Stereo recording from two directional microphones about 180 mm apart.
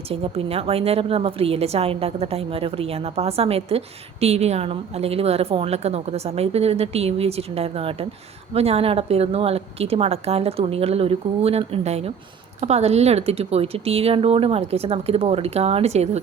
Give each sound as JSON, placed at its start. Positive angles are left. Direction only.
{"t": 0.1, "sound": "a woman's voice", "side_deg": -30}